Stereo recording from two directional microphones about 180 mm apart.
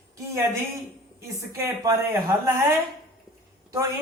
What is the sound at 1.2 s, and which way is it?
A woman's voice, 15° right (ahead or behind).